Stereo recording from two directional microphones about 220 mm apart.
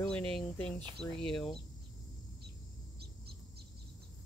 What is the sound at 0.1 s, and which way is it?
Speech, 5° left (ahead or behind).